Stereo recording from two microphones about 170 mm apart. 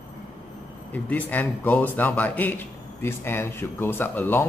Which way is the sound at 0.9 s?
10° left (ahead or behind).